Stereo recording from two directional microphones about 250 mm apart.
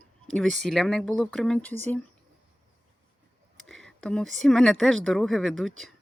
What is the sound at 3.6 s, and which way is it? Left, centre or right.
Speech, centre.